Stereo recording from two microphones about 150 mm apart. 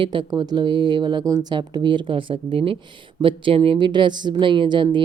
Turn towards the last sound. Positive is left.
turn(degrees=-30)  # may be behind; listen again after turning